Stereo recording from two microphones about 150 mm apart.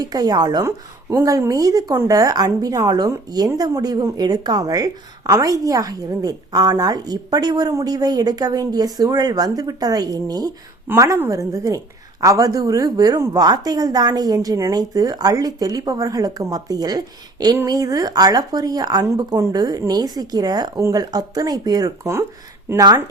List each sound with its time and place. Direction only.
0.0 s a woman's voice: 25° right (ahead or behind)